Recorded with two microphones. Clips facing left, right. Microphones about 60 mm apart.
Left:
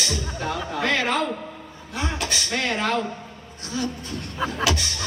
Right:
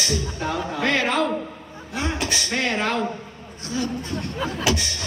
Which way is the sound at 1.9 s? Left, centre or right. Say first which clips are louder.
Right 2 dB; right.